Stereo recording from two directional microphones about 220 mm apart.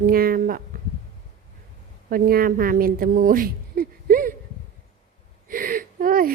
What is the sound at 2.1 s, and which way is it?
A woman's voice, 40° right (ahead or behind).